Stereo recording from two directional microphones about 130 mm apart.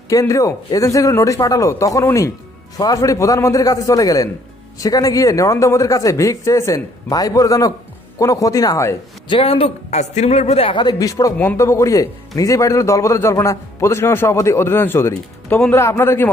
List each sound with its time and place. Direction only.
0.1 s a man's voice: 25° left (ahead or behind)
9.3 s a man's voice: 45° left (ahead or behind)
9.9 s a man's voice: 55° left (ahead or behind); by 16.3 s 15° left (ahead or behind)